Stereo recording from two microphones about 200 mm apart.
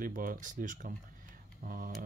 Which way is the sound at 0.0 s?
45° right (ahead or behind).